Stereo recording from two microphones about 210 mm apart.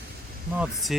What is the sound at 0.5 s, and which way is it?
Speech, centre (ahead or behind).